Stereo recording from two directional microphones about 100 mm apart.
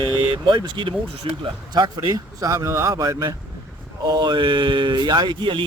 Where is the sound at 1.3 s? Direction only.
65° right (ahead or behind).